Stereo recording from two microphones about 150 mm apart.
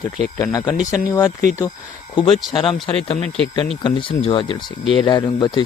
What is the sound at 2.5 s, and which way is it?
Speech, 35° left (ahead or behind).